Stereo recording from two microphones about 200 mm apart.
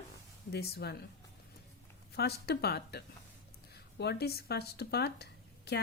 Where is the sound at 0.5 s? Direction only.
55° left (ahead or behind).